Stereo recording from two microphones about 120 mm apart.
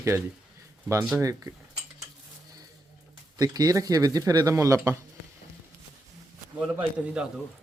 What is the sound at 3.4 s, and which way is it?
Speech, 35° right (ahead or behind).